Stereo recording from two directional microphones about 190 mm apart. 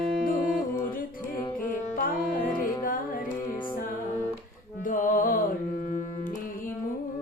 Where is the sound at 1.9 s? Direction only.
45° left (ahead or behind).